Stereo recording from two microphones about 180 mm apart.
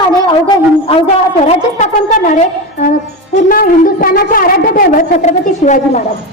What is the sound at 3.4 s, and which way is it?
A woman's voice, 55° left (ahead or behind).